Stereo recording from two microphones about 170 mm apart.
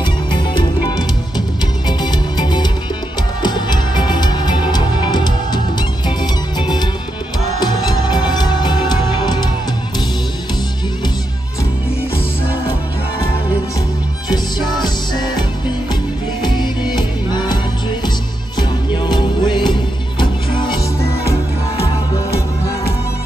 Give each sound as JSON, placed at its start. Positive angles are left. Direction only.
{"t": 0.0, "sound": "music", "side_deg": 30}
{"t": 14.3, "sound": "music", "side_deg": 25}
{"t": 16.4, "sound": "music", "side_deg": 25}
{"t": 18.6, "sound": "music", "side_deg": 25}